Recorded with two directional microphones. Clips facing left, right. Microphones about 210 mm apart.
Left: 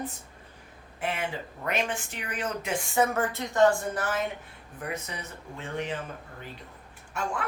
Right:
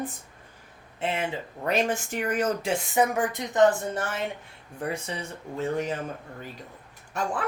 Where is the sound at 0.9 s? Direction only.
25° right (ahead or behind).